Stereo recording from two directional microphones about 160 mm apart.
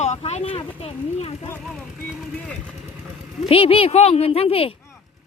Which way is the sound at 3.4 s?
35° left (ahead or behind).